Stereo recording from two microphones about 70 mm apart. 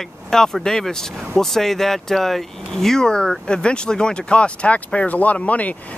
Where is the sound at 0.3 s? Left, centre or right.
Centre.